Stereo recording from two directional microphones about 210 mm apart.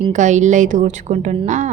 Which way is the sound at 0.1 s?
35° right (ahead or behind).